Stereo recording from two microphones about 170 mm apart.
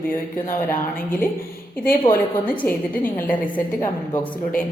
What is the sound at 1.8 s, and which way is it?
Speech, 55° left (ahead or behind).